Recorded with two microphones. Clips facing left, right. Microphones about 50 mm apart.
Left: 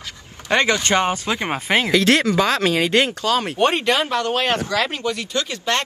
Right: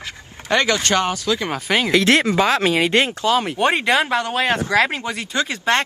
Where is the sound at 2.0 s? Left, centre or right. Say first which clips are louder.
Right 1 dB; right.